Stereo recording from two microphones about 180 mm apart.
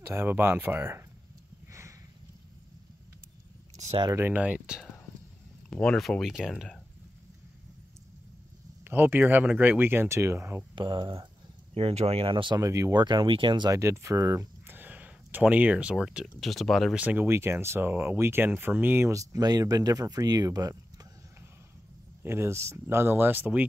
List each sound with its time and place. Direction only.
0.0 s speech: 15° right (ahead or behind)
1.7 s a sound: 15° right (ahead or behind)
3.7 s a sound: 40° right (ahead or behind)
4.0 s speech: 15° right (ahead or behind)
5.7 s speech: 5° left (ahead or behind)
8.8 s speech: 10° right (ahead or behind)
10.7 s speech: 25° right (ahead or behind)